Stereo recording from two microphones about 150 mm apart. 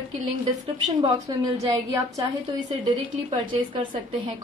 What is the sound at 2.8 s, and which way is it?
A woman's voice, 35° right (ahead or behind).